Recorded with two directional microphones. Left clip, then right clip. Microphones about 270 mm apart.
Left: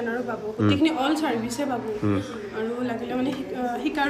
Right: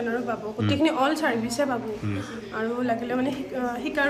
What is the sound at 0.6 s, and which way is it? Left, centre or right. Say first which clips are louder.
Speech: even; centre.